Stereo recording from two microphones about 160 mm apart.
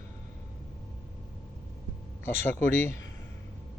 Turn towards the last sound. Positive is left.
turn(degrees=15)  # may be behind; listen again after turning